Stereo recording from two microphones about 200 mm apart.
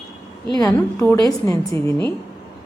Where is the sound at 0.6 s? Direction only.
10° left (ahead or behind).